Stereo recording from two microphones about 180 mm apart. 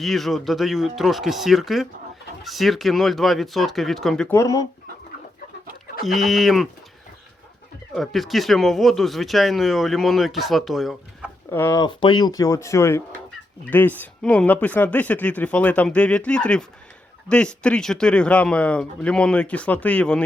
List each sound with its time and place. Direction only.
0.0 s speech: centre (ahead or behind)
4.3 s speech: 15° left (ahead or behind)
6.1 s speech: centre (ahead or behind)
7.9 s speech: centre (ahead or behind)
11.5 s speech: 15° left (ahead or behind)